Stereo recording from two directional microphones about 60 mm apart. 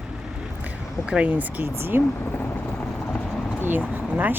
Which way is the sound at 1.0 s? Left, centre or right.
Centre.